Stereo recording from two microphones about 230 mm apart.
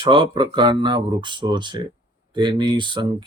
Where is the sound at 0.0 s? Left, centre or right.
Right.